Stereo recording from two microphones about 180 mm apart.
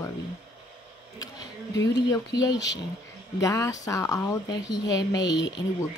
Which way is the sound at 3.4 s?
20° left (ahead or behind).